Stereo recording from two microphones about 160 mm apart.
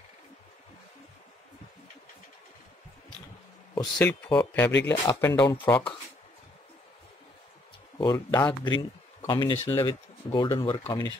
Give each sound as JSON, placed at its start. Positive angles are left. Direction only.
{"t": 4.0, "sound": "speech", "side_deg": 10}
{"t": 4.8, "sound": "speech", "side_deg": 20}
{"t": 8.0, "sound": "speech", "side_deg": 25}